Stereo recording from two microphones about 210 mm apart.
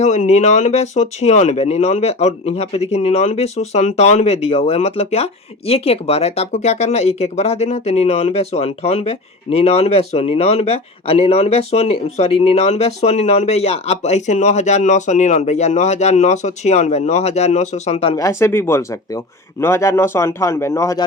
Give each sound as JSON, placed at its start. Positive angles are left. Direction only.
{"t": 0.0, "sound": "speech", "side_deg": 35}
{"t": 18.2, "sound": "speech", "side_deg": 10}